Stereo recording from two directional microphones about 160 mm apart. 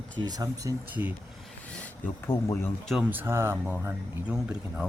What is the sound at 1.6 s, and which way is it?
Speech, 10° left (ahead or behind).